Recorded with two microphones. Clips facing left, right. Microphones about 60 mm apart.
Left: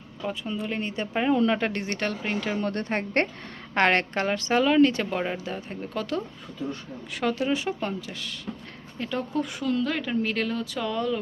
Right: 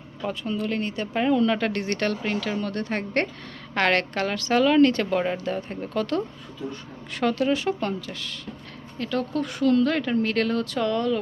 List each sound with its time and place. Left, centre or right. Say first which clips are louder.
0.2 s speech: right 2 dB; centre
0.5 s speech: right 5 dB; centre
4.6 s speech: right 2 dB; centre
5.0 s speech: right 4 dB; centre